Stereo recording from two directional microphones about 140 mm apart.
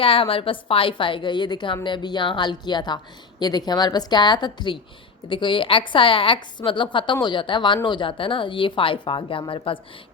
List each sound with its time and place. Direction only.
0.0 s a woman's voice: 40° left (ahead or behind)